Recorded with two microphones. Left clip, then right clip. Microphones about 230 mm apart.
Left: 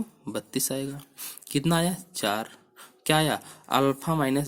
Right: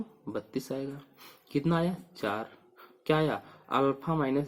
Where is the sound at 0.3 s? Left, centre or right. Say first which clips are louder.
Left 4 dB; left.